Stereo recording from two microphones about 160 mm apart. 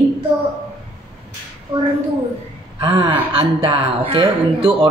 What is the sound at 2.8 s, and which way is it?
A woman's voice, 35° right (ahead or behind).